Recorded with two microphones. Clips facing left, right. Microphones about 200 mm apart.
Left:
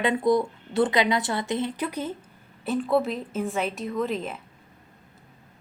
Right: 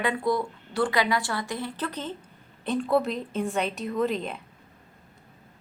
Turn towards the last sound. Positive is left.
turn(degrees=5)  # may be behind; listen again after turning